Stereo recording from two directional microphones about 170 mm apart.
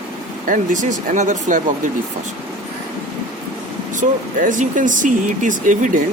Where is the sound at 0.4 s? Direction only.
50° right (ahead or behind).